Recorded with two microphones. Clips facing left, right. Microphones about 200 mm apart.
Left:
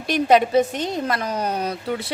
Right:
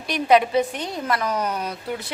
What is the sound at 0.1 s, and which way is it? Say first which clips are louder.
Speech: left 2 dB; 45° left (ahead or behind).